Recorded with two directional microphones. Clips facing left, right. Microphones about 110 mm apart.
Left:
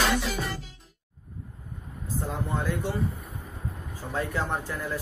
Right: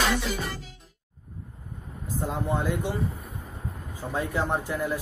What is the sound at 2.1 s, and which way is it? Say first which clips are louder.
Speech: right 3 dB; 15° right (ahead or behind).